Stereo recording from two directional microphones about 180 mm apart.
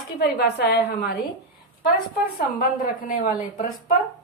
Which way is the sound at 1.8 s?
50° left (ahead or behind).